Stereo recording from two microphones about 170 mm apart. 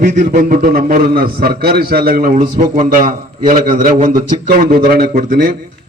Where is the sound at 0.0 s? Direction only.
50° right (ahead or behind).